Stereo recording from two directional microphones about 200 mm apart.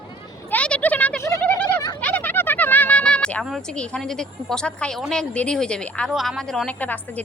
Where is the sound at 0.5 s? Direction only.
5° left (ahead or behind).